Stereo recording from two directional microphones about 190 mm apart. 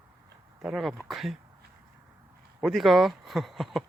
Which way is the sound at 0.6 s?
Centre (ahead or behind).